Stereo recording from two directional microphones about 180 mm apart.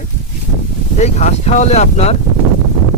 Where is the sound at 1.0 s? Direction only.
40° left (ahead or behind).